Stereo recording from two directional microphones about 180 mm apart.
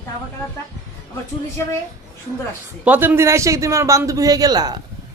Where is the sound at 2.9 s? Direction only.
10° right (ahead or behind).